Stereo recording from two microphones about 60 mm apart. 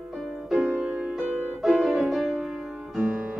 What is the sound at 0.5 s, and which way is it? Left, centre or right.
Music, right.